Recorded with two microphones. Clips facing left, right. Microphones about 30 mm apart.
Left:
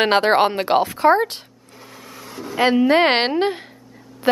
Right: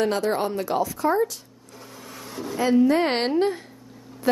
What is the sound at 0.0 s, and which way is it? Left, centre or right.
A woman's voice, left.